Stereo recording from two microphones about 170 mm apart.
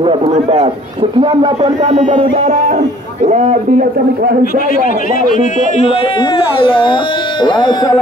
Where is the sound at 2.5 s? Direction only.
45° right (ahead or behind).